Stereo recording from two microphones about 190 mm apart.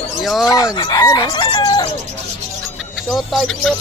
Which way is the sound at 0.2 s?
Centre (ahead or behind).